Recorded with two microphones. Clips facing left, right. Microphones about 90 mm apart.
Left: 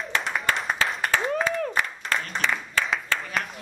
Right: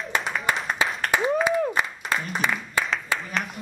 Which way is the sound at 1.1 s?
15° right (ahead or behind).